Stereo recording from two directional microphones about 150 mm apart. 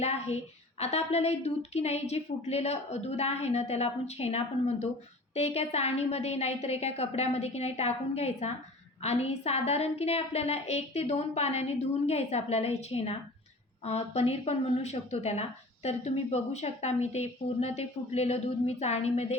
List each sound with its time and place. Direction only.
0.0 s speech: 45° left (ahead or behind)